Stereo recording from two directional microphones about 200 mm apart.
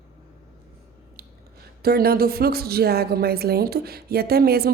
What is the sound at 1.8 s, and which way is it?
A woman's voice, 50° right (ahead or behind).